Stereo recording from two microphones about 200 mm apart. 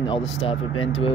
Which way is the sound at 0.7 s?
90° left.